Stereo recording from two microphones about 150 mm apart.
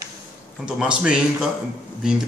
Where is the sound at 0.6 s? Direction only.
5° right (ahead or behind).